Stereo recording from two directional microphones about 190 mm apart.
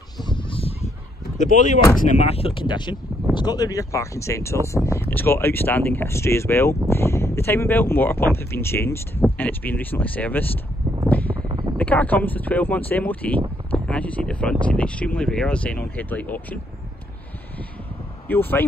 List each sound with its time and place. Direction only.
0.2 s fowl: 25° left (ahead or behind)
1.4 s speech: 40° left (ahead or behind); by 10.5 s 10° left (ahead or behind)
11.1 s a sound: 10° left (ahead or behind)
11.7 s speech: 5° left (ahead or behind)
18.3 s speech: 10° left (ahead or behind)